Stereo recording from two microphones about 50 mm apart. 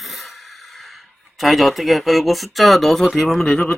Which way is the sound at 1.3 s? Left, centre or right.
Centre.